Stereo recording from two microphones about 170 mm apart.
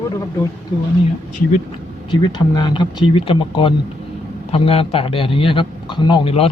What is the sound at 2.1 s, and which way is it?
A man's voice, 25° left (ahead or behind).